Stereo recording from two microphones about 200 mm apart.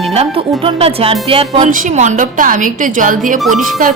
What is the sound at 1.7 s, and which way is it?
A woman's voice, 40° right (ahead or behind).